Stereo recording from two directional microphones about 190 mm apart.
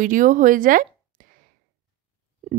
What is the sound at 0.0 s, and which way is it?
Speech, 45° right (ahead or behind).